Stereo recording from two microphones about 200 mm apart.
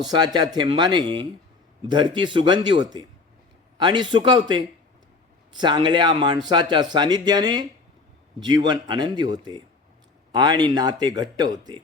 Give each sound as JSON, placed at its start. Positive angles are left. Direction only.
{"t": 0.0, "sound": "speech", "side_deg": -20}